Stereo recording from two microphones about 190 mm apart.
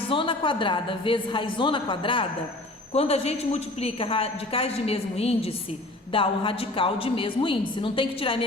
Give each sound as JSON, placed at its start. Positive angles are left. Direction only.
{"t": 0.1, "sound": "a woman's voice", "side_deg": 25}